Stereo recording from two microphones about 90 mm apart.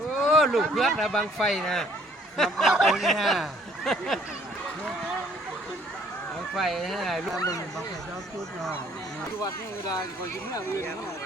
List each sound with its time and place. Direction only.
0.2 s speech: 5° right (ahead or behind)
6.6 s speech: centre (ahead or behind)
7.3 s speech: 40° left (ahead or behind)
10.5 s speech: 30° left (ahead or behind)